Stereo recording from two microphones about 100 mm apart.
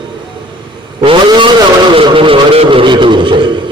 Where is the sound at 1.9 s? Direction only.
60° right (ahead or behind).